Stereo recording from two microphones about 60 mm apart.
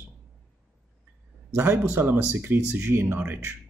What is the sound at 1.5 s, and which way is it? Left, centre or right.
Speech, right.